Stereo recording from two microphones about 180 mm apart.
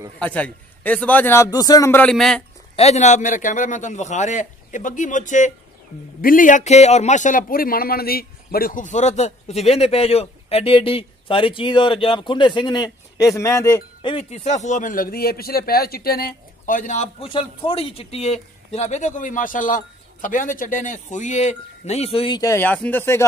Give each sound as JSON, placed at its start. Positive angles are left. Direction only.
{"t": 0.2, "sound": "a man's voice", "side_deg": 5}
{"t": 2.7, "sound": "a man's voice", "side_deg": 35}
{"t": 14.1, "sound": "a man's voice", "side_deg": 35}
{"t": 22.4, "sound": "a man's voice", "side_deg": 15}